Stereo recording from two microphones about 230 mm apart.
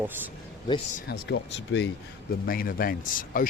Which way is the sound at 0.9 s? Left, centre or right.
Left.